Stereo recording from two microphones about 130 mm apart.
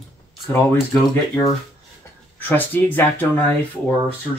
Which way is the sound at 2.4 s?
15° left (ahead or behind).